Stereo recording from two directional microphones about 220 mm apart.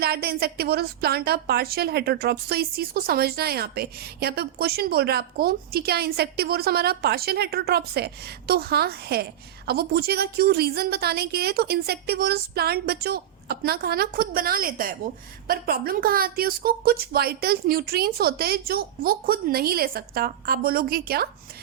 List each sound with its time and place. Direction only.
0.0 s a woman's voice: 45° right (ahead or behind)